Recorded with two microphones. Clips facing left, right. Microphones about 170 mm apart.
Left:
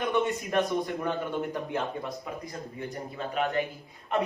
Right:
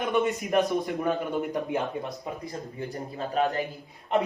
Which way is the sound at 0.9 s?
15° right (ahead or behind).